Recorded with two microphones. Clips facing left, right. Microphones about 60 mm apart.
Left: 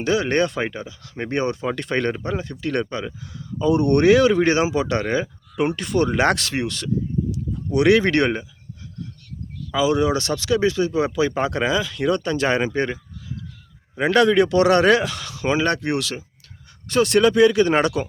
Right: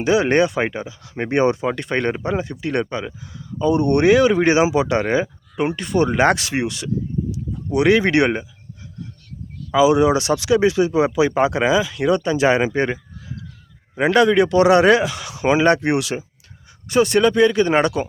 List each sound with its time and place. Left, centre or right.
0.0 s speech: centre
1.7 s speech: centre
9.7 s speech: centre
14.0 s speech: centre
15.3 s speech: centre
16.9 s speech: centre